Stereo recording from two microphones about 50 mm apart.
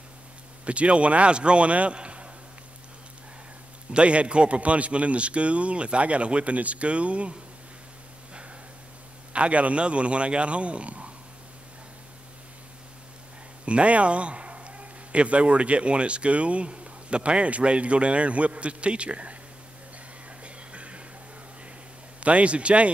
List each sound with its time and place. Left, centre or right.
0.7 s a man's voice: right
3.9 s a man's voice: right
9.3 s a man's voice: right
13.7 s a man's voice: right
20.4 s a sound: right
22.2 s a man's voice: right